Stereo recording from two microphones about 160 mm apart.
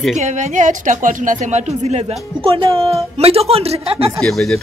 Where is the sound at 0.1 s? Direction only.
50° right (ahead or behind).